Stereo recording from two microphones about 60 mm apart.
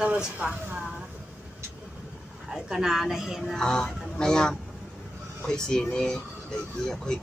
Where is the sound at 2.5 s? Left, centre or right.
Centre.